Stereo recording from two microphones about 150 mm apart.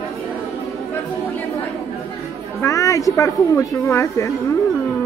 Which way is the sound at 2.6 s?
20° left (ahead or behind).